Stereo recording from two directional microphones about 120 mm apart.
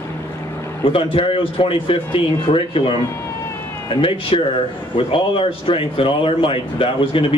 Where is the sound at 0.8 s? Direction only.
50° left (ahead or behind).